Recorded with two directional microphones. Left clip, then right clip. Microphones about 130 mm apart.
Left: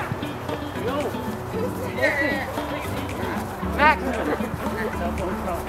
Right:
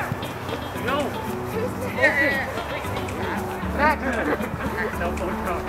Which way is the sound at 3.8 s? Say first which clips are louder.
Left 3 dB; 35° left (ahead or behind).